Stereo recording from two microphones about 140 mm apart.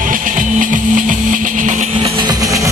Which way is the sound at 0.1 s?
70° right (ahead or behind).